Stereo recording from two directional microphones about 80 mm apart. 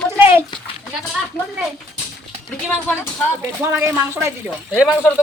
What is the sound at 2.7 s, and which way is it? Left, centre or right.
Speech, left.